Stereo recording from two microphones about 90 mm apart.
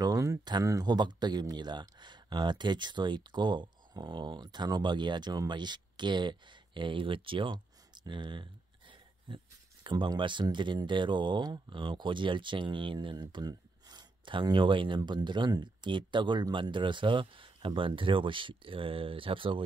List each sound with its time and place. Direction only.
0.0 s speech: 40° right (ahead or behind); by 7.5 s 70° right (ahead or behind)
7.5 s a sound: 55° right (ahead or behind)
9.8 s speech: 60° right (ahead or behind)
15.0 s speech: 55° right (ahead or behind); by 19.6 s 75° right (ahead or behind)